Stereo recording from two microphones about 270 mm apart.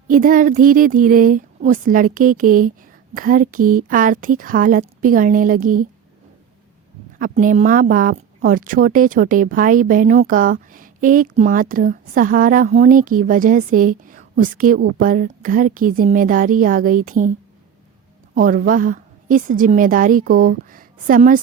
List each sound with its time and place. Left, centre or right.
0.1 s speech: right
7.2 s speech: right
18.3 s speech: right